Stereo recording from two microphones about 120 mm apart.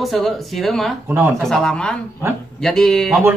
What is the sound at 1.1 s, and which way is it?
Speech, 20° right (ahead or behind).